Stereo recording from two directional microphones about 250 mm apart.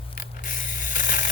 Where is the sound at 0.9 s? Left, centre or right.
Left.